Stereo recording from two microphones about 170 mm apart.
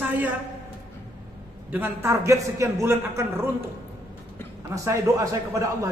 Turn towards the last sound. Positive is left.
turn(degrees=-15)  # may be behind; listen again after turning